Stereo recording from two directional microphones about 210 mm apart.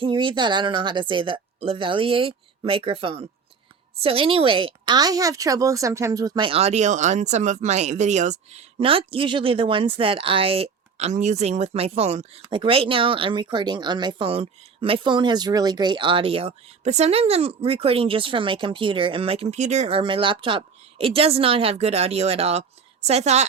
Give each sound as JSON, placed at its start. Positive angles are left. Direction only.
{"t": 0.0, "sound": "a woman's voice", "side_deg": -25}